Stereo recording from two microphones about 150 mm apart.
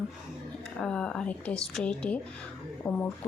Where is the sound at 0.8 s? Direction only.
5° left (ahead or behind).